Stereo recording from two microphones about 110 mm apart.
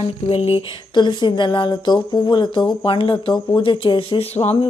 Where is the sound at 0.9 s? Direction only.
45° left (ahead or behind).